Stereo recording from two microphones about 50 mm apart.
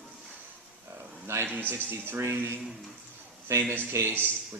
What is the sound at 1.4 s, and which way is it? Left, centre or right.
Speech, right.